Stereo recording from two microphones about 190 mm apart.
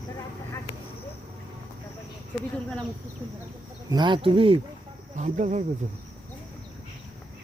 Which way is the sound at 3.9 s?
25° right (ahead or behind).